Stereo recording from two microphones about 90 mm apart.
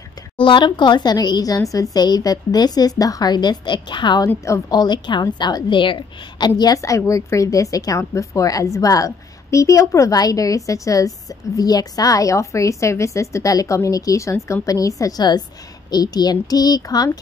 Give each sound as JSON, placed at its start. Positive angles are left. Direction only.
{"t": 0.4, "sound": "a woman's voice", "side_deg": 65}